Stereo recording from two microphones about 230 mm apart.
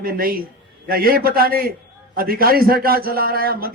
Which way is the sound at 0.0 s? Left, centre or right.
Right.